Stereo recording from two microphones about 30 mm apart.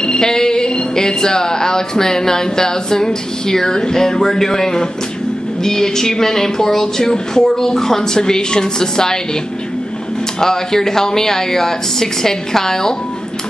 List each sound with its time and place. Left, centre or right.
0.0 s speech: left
10.4 s speech: centre